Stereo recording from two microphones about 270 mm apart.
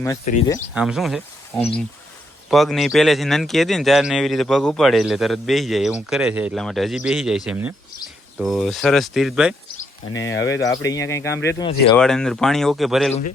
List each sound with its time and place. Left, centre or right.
0.3 s speech: left
0.7 s speech: centre
10.1 s speech: left
10.5 s speech: centre
11.9 s speech: centre